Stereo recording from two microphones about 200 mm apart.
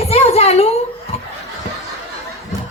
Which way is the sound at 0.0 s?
30° left (ahead or behind).